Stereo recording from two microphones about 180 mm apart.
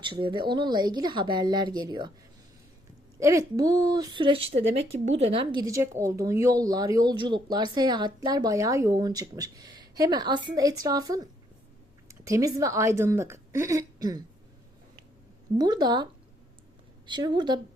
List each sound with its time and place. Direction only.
0.0 s a woman's voice: 25° right (ahead or behind)
3.2 s a woman's voice: 15° right (ahead or behind)
15.5 s a woman's voice: 20° right (ahead or behind)
17.1 s a woman's voice: 25° right (ahead or behind)